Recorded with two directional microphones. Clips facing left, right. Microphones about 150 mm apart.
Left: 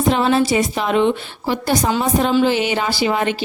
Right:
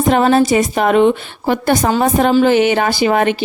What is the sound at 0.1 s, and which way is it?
A woman's voice, 50° right (ahead or behind).